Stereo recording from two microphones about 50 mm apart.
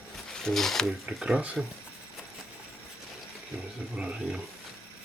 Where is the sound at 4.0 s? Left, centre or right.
Right.